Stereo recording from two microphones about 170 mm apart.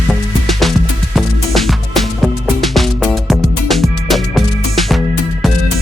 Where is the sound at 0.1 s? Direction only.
Centre (ahead or behind).